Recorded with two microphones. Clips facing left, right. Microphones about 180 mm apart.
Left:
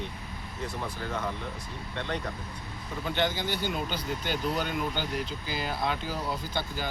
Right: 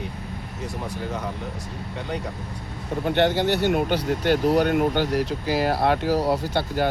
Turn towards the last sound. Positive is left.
turn(degrees=-65)  # may be behind; listen again after turning